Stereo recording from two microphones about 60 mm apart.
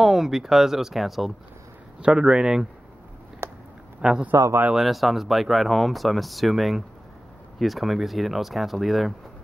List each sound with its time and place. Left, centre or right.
0.0 s speech: centre
2.0 s speech: centre
3.4 s a sound: right
4.0 s a man's voice: centre